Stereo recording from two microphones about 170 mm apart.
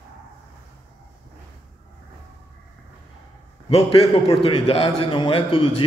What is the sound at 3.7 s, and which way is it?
A man's voice, 35° left (ahead or behind).